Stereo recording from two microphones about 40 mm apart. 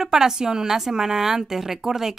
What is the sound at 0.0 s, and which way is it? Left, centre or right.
A woman's voice, centre.